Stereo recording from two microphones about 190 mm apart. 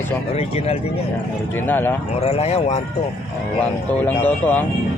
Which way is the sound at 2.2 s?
30° left (ahead or behind).